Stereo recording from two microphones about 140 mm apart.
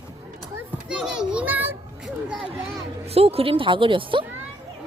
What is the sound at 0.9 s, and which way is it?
Children playing, 5° right (ahead or behind).